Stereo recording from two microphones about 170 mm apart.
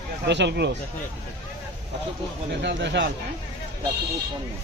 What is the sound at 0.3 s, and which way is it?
Speech, 90° right.